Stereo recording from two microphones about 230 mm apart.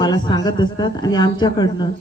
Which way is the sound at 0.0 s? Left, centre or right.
Centre.